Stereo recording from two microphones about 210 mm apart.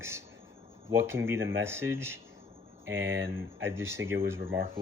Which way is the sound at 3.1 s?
60° right (ahead or behind).